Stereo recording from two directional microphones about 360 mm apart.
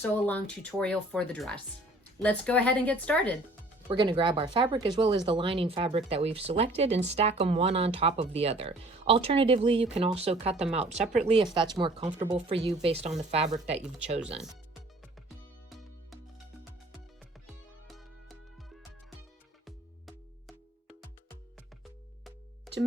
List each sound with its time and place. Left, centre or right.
0.1 s speech: centre
3.8 s speech: centre
15.7 s music: centre
17.8 s music: centre